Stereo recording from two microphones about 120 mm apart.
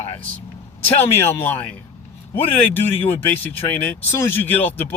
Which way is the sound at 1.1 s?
20° left (ahead or behind).